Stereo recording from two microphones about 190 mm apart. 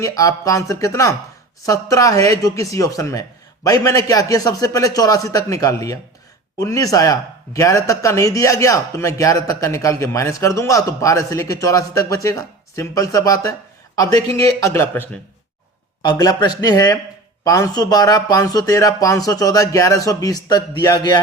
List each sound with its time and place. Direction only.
0.0 s speech: 15° left (ahead or behind)
16.0 s speech: 20° left (ahead or behind)